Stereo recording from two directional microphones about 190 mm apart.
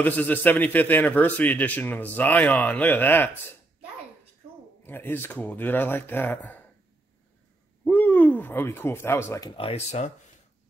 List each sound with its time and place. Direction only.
0.0 s a man's voice: 10° left (ahead or behind)
4.8 s a man's voice: 10° left (ahead or behind)
7.8 s speech: 10° left (ahead or behind)
9.6 s speech: 35° left (ahead or behind)